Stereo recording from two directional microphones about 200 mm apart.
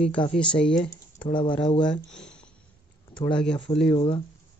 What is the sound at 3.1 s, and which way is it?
Speech, 25° left (ahead or behind).